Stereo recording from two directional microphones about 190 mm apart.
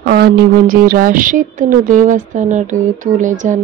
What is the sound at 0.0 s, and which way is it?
A woman's voice, 55° right (ahead or behind).